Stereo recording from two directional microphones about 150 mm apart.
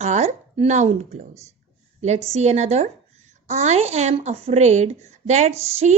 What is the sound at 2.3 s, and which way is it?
Speech, 50° right (ahead or behind).